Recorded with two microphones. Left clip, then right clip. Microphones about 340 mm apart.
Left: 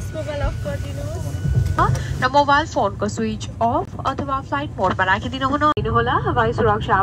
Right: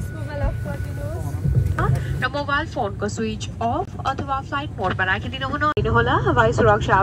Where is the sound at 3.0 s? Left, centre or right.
Centre.